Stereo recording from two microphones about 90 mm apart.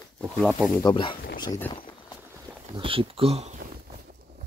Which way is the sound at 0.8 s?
55° left (ahead or behind).